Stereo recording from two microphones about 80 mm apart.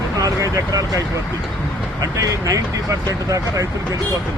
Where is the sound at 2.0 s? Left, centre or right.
Right.